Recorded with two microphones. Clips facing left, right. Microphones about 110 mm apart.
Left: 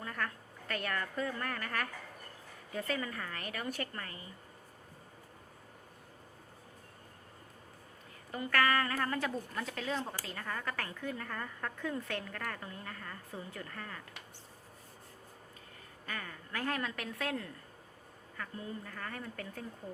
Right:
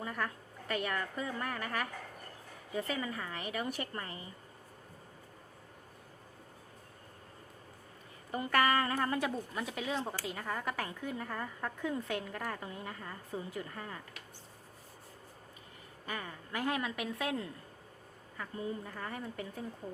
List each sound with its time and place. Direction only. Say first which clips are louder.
0.0 s a sound: right 2 dB; 10° right (ahead or behind)
0.7 s a woman's voice: right 2 dB; 10° right (ahead or behind)
8.3 s a woman's voice: right 1 dB; 20° right (ahead or behind)
16.0 s a woman's voice: right 2 dB; 15° right (ahead or behind)